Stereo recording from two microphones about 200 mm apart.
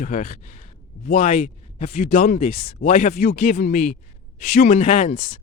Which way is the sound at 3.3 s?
50° left (ahead or behind).